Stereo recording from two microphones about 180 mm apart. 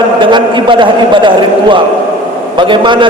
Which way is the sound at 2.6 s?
25° right (ahead or behind).